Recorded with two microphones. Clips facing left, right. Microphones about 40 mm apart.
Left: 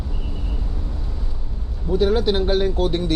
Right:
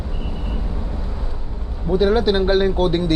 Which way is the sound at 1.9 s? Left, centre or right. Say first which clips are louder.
Right 2 dB; centre.